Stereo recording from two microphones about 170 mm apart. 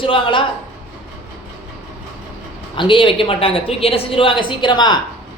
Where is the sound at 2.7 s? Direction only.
30° left (ahead or behind).